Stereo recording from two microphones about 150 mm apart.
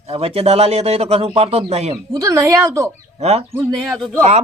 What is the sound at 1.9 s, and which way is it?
Speech, 25° right (ahead or behind).